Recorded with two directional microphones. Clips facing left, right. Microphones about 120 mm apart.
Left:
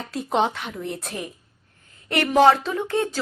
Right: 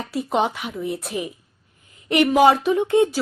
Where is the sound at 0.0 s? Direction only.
5° right (ahead or behind).